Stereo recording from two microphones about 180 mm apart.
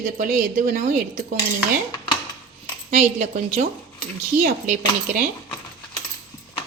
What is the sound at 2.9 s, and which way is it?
Speech, 45° right (ahead or behind).